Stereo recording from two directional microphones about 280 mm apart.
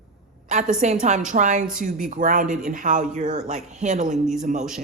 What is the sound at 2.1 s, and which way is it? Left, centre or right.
Speech, right.